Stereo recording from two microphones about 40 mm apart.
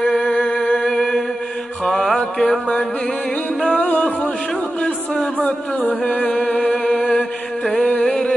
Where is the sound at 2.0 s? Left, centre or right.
Centre.